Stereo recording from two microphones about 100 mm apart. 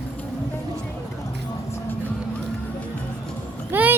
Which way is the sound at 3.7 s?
20° right (ahead or behind).